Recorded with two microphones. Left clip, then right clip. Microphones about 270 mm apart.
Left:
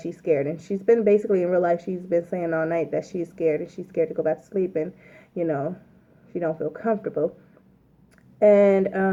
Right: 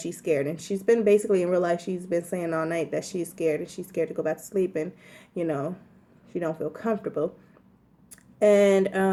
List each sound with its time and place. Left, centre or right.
0.1 s speech: right
8.4 s speech: right